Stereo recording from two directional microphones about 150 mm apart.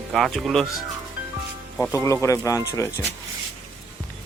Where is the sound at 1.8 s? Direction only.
20° left (ahead or behind).